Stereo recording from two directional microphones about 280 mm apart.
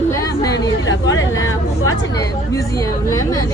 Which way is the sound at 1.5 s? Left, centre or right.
Left.